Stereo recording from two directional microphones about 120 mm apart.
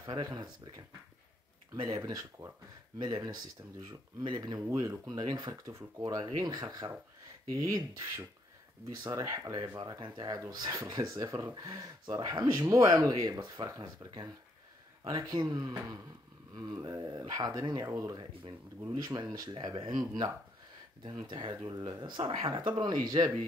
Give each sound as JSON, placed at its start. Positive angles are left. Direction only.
{"t": 0.0, "sound": "speech", "side_deg": -35}
{"t": 2.0, "sound": "speech", "side_deg": -30}
{"t": 4.6, "sound": "speech", "side_deg": -25}
{"t": 5.2, "sound": "speech", "side_deg": -40}